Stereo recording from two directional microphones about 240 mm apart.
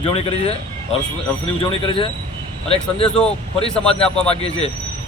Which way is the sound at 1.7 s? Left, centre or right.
Left.